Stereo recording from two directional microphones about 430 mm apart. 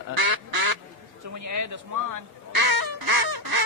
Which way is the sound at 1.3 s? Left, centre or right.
Right.